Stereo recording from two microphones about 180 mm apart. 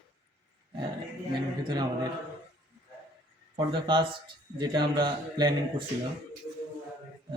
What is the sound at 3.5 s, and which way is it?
Speech, 25° right (ahead or behind).